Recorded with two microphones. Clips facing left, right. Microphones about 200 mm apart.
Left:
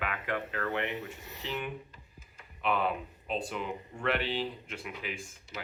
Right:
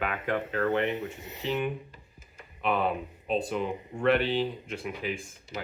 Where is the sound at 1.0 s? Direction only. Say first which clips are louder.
Right 7 dB; 20° right (ahead or behind).